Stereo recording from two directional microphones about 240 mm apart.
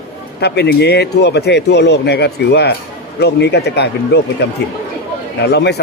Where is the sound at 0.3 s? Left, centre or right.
Left.